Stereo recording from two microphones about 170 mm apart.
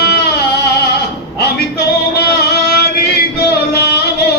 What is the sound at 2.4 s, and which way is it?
Singing, 75° left (ahead or behind).